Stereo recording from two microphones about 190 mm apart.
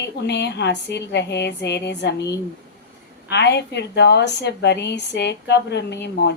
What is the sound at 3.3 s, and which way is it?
A woman's voice, 60° left (ahead or behind).